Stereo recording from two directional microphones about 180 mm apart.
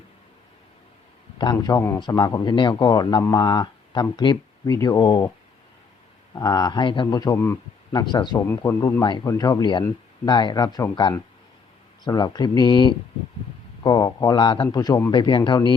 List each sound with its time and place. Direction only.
1.4 s speech: 25° left (ahead or behind)
6.3 s speech: 20° left (ahead or behind)